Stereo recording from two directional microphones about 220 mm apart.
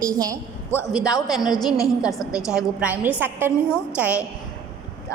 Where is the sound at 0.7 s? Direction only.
15° left (ahead or behind).